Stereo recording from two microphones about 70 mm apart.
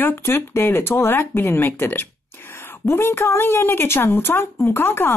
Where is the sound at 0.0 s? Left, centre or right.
Left.